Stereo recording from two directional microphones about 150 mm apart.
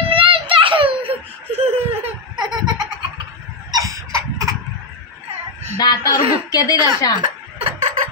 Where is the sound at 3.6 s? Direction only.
25° right (ahead or behind).